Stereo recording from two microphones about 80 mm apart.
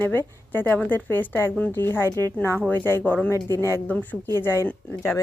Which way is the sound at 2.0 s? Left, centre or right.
Right.